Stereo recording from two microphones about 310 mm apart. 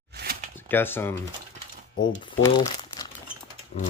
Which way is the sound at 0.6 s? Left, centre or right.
Centre.